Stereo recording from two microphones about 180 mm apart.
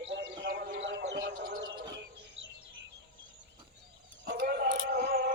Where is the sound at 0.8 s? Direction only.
80° right.